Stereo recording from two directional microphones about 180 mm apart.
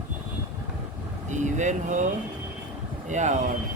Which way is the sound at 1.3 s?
40° right (ahead or behind).